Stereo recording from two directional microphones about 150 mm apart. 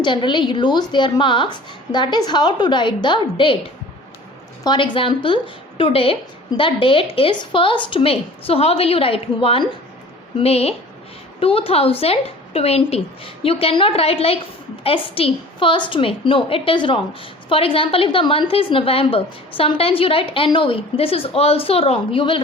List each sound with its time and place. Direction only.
0.0 s a woman's voice: 30° left (ahead or behind)
4.6 s a woman's voice: 30° left (ahead or behind)